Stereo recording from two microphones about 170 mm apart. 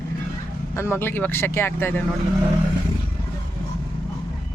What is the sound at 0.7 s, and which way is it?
Speech, 15° left (ahead or behind).